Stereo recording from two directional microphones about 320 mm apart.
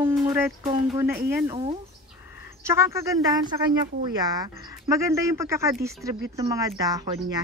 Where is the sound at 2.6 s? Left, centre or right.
Centre.